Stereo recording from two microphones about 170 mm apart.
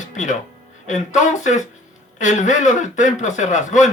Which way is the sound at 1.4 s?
45° left (ahead or behind).